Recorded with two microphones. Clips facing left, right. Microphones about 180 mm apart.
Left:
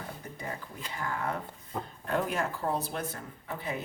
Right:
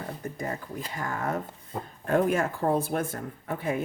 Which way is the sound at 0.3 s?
45° right (ahead or behind).